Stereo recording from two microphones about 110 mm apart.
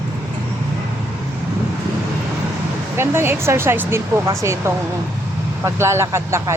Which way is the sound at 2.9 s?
20° right (ahead or behind).